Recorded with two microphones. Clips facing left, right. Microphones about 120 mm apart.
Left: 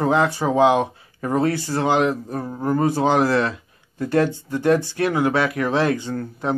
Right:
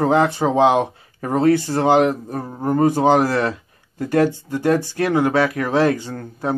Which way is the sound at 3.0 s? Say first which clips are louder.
Right 2 dB; 50° right (ahead or behind).